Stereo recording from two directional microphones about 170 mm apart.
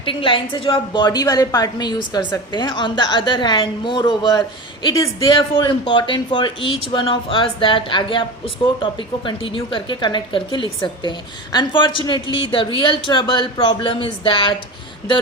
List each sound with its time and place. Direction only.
0.0 s a woman's voice: 30° left (ahead or behind)